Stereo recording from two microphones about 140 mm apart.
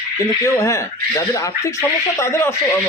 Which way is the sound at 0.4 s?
20° left (ahead or behind).